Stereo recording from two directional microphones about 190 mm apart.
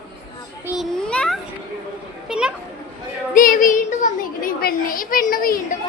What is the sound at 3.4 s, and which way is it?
A child's voice, 45° left (ahead or behind).